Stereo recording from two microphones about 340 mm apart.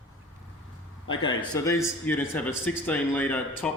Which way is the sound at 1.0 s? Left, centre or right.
Centre.